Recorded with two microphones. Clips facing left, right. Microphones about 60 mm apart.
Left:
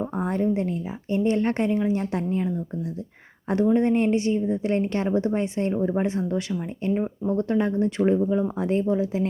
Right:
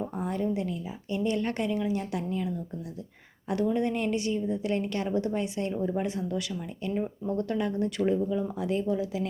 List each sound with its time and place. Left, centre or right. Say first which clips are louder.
0.0 s a woman's voice: left 5 dB; left
3.5 s a woman's voice: left 7 dB; left